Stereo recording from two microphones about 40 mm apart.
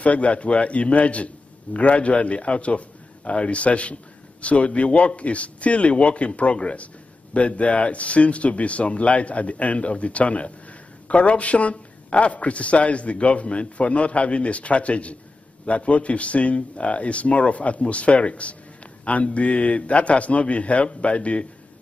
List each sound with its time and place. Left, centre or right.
0.0 s a man's voice: left